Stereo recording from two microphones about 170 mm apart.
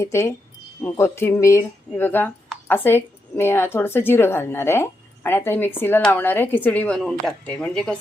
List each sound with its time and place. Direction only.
0.0 s a woman's voice: 15° left (ahead or behind)